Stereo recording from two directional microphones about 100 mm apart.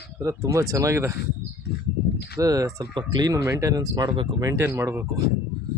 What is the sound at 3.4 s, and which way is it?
Speech, 30° right (ahead or behind).